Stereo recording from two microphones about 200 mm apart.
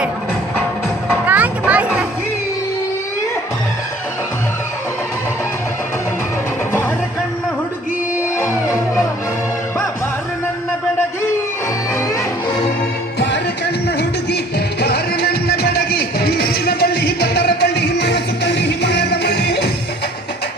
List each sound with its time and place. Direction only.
1.3 s music: 5° right (ahead or behind)
11.9 s music: 15° left (ahead or behind)
13.1 s music: 60° left (ahead or behind)